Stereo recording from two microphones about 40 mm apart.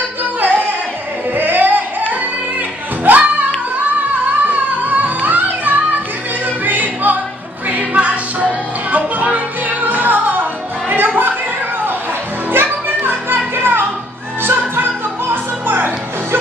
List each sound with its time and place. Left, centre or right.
0.2 s music: right
1.3 s a sound: right
3.0 s singing: right
4.5 s music: right
12.4 s music: right